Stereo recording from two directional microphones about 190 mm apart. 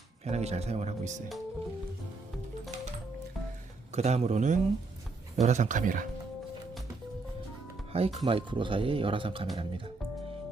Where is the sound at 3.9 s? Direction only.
35° right (ahead or behind).